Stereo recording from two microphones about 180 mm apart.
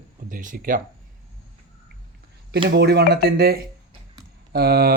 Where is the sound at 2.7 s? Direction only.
60° right (ahead or behind).